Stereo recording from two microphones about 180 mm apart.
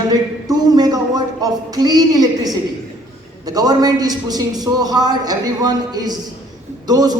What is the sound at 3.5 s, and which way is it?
A man's voice, 20° right (ahead or behind).